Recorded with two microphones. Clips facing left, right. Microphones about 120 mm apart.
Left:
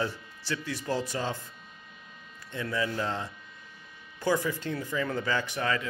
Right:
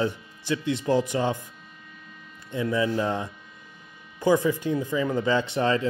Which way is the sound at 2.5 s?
20° right (ahead or behind).